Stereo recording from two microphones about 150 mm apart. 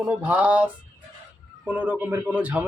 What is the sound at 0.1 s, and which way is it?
Speech, 10° right (ahead or behind).